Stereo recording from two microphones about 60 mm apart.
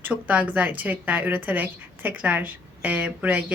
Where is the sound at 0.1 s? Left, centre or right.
Right.